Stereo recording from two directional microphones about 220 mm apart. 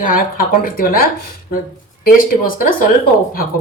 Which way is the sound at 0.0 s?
40° left (ahead or behind).